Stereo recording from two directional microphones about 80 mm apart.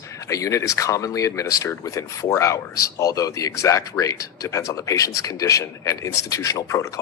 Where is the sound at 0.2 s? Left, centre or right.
Left.